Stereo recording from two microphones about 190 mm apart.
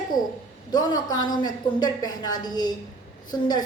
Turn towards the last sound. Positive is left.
turn(degrees=20)  # may be behind; listen again after turning